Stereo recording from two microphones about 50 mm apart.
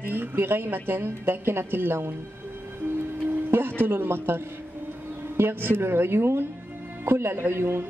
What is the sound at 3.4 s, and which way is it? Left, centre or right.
Music, right.